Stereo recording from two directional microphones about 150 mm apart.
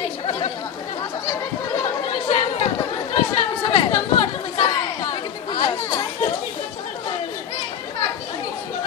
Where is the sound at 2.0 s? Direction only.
45° left (ahead or behind).